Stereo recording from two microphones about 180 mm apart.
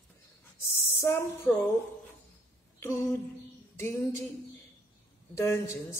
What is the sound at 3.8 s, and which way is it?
Speech, 15° left (ahead or behind).